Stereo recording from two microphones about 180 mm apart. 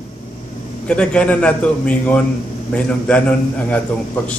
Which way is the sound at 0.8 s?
5° left (ahead or behind).